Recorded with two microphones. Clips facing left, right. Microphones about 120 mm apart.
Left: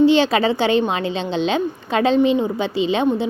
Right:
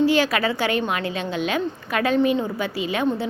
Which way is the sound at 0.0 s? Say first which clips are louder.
Left 5 dB; 25° left (ahead or behind).